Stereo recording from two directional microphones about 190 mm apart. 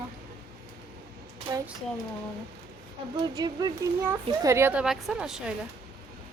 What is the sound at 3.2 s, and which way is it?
A child's voice, 20° right (ahead or behind).